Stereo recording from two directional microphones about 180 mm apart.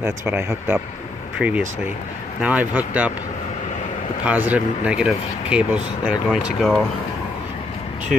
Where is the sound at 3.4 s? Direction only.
40° left (ahead or behind).